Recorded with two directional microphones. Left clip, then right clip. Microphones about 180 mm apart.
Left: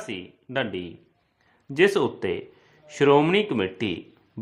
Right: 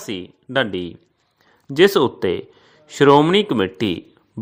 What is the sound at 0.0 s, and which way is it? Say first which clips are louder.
A man's voice: right 5 dB; 35° right (ahead or behind).